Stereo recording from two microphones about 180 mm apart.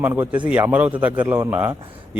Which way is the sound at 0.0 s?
10° right (ahead or behind).